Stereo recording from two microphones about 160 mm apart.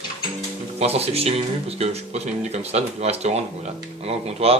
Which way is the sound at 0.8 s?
40° right (ahead or behind).